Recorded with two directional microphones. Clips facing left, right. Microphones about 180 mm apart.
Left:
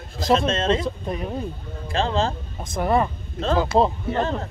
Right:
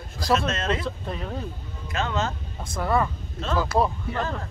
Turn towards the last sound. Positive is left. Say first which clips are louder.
# left 5 dB
turn(degrees=25)  # may be behind; listen again after turning